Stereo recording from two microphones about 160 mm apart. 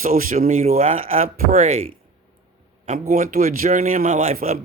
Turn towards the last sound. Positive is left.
turn(degrees=-60)  # may be behind; listen again after turning